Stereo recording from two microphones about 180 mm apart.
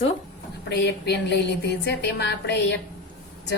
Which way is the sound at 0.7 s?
70° left (ahead or behind).